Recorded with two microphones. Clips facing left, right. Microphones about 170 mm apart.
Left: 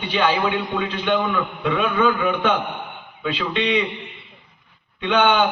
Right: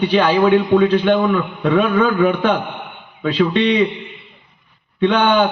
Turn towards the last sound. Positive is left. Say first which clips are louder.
# right 4 dB
turn(degrees=-40)  # may be behind; listen again after turning